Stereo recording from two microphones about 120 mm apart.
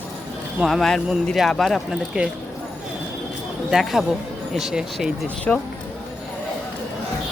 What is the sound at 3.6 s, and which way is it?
Speech, centre (ahead or behind).